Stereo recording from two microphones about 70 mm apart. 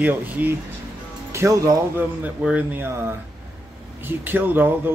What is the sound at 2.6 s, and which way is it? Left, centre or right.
Speech, right.